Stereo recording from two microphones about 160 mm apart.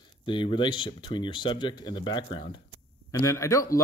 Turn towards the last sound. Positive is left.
turn(degrees=20)  # may be behind; listen again after turning